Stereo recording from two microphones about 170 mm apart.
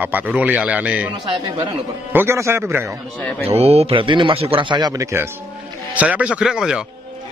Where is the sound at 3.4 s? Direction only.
35° right (ahead or behind); by 6.8 s 5° right (ahead or behind).